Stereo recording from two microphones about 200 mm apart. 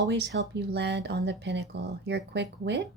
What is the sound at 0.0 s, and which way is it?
Speech, 60° right (ahead or behind).